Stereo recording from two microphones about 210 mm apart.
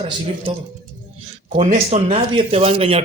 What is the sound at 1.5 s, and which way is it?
Speech, 30° right (ahead or behind).